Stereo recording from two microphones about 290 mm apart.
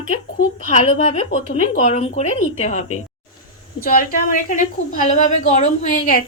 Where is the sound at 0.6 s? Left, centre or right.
Left.